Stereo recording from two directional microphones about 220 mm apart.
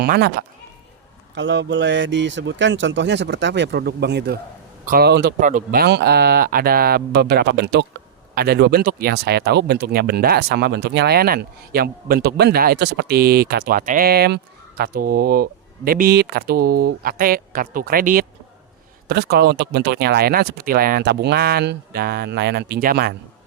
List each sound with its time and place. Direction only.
0.0 s speech: 45° right (ahead or behind)